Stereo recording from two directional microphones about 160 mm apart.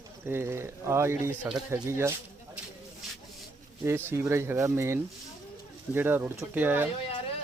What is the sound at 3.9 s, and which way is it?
Speech, 15° right (ahead or behind).